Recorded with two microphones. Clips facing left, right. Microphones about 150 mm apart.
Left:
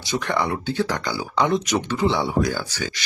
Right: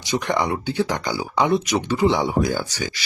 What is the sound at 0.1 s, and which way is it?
Speech, 15° right (ahead or behind).